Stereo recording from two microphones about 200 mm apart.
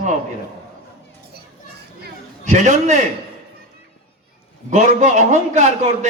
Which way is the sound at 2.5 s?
35° right (ahead or behind).